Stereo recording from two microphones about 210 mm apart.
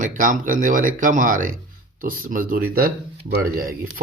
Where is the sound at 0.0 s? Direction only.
40° right (ahead or behind).